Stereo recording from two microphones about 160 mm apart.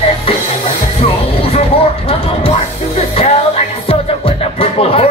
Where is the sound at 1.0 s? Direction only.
40° left (ahead or behind).